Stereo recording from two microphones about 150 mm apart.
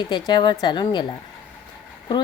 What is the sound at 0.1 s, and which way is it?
Speech, 30° left (ahead or behind).